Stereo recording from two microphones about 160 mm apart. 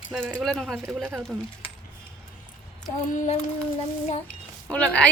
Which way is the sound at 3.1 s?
55° left (ahead or behind).